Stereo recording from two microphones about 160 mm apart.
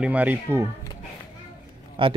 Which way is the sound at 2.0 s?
30° right (ahead or behind).